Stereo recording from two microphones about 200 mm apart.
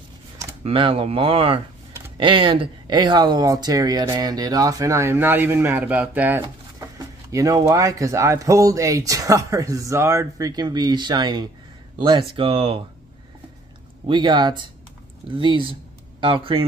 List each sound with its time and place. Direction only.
0.7 s speech: 25° right (ahead or behind)
14.0 s speech: 20° right (ahead or behind)